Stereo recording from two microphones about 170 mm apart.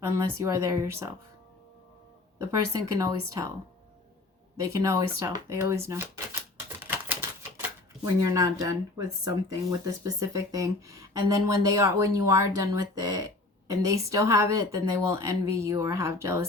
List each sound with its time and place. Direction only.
0.1 s speech: 15° right (ahead or behind)
2.4 s speech: 15° right (ahead or behind)
4.6 s speech: 20° right (ahead or behind)
6.8 s typewriter: 15° right (ahead or behind)
8.0 s speech: 20° right (ahead or behind)